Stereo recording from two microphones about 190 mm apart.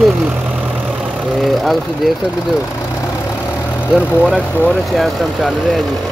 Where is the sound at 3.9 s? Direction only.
5° right (ahead or behind).